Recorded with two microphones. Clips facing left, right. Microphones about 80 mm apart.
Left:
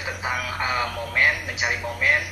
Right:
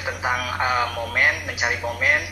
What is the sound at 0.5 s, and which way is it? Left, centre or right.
Speech, right.